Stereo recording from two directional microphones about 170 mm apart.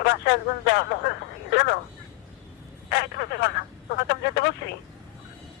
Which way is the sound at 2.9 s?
75° left (ahead or behind).